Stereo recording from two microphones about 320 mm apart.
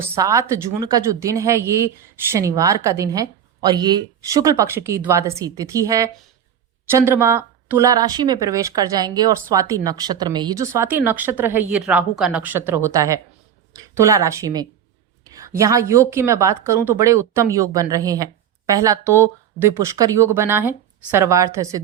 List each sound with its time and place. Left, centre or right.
0.2 s a woman's voice: centre